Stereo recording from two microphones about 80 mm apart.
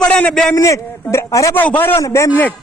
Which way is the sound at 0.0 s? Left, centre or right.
Centre.